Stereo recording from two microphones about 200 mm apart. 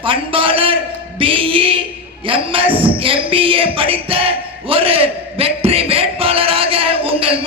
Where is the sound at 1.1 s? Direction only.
25° right (ahead or behind).